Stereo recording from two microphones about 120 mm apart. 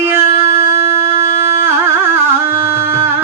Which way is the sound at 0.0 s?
20° right (ahead or behind).